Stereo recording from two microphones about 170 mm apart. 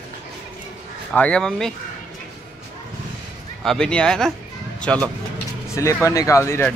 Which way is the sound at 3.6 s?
5° left (ahead or behind).